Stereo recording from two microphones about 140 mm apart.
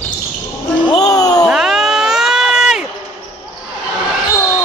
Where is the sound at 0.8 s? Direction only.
30° left (ahead or behind).